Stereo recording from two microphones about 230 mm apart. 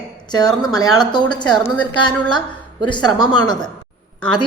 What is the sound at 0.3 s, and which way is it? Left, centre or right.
Speech, centre.